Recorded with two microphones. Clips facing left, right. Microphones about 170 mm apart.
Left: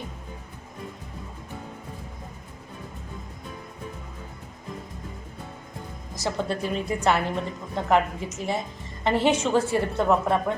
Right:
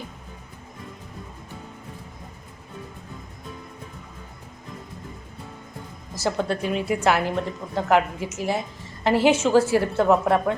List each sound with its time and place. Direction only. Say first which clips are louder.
6.1 s a woman's voice: right 3 dB; centre (ahead or behind)